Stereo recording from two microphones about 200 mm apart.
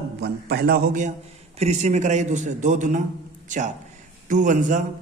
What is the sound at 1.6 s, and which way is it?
A man's voice, 35° right (ahead or behind).